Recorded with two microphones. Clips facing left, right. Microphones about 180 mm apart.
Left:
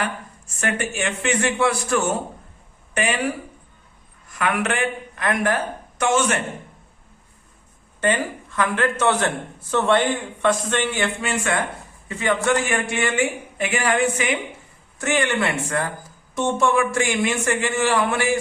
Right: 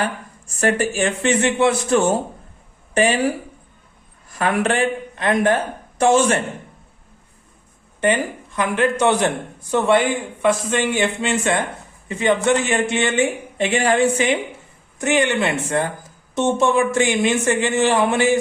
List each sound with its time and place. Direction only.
0.0 s a man's voice: 35° right (ahead or behind)
8.0 s a man's voice: 15° right (ahead or behind)
14.9 s a man's voice: 20° right (ahead or behind)